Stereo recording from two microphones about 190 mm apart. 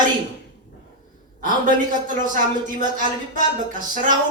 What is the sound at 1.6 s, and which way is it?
Speech, 45° right (ahead or behind).